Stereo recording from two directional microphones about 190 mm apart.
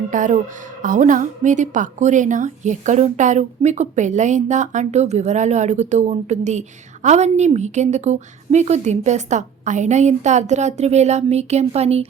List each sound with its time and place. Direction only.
0.1 s a woman's voice: 40° right (ahead or behind)